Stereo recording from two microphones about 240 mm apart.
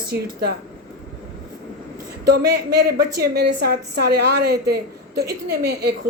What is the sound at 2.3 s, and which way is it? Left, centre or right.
A woman's voice, right.